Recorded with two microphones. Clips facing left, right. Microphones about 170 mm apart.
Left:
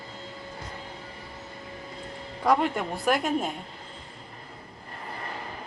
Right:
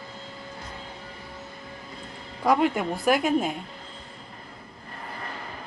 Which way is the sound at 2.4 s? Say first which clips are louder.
Right 2 dB; 5° right (ahead or behind).